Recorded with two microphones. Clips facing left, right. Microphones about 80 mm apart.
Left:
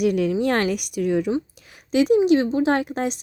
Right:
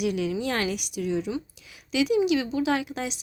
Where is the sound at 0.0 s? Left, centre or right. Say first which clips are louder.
Left 7 dB; left.